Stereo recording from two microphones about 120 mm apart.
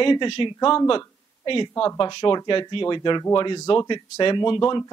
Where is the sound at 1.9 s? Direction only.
45° left (ahead or behind).